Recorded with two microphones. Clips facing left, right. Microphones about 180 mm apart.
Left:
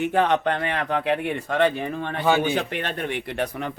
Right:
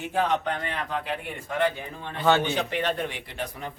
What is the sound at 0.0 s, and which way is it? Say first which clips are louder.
Speech: left 5 dB; 65° left (ahead or behind).